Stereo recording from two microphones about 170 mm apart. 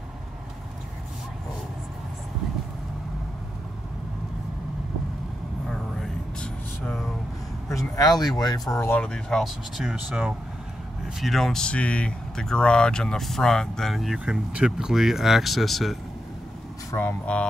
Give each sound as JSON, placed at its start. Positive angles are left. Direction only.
{"t": 5.7, "sound": "vehicle", "side_deg": 5}
{"t": 7.9, "sound": "speech", "side_deg": 25}